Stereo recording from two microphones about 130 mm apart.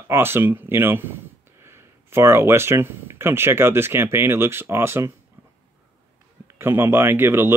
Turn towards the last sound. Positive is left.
turn(degrees=-20)  # may be behind; listen again after turning